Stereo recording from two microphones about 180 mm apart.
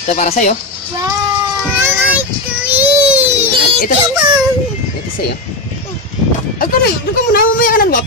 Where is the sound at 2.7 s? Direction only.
10° right (ahead or behind).